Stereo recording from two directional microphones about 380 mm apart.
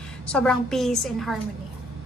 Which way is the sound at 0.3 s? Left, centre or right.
Centre.